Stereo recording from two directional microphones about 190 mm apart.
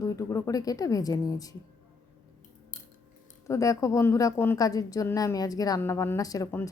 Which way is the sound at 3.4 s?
15° left (ahead or behind).